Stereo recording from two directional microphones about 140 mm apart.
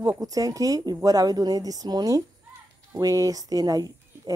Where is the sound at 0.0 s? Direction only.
25° right (ahead or behind).